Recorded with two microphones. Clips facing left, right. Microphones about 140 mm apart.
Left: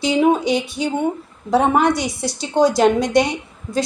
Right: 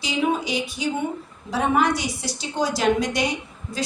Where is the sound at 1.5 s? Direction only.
55° left (ahead or behind).